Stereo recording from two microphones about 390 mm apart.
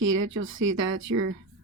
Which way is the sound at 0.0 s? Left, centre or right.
Right.